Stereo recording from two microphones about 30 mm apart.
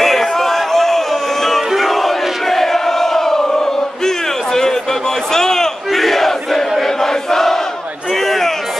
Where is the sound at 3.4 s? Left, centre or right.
Left.